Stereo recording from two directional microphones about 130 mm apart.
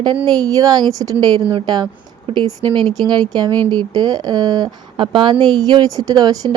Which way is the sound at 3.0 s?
30° right (ahead or behind).